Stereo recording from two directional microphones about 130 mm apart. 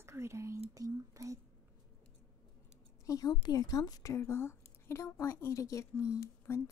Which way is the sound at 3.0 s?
25° left (ahead or behind).